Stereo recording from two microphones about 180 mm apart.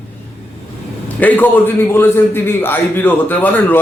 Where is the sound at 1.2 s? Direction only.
10° left (ahead or behind).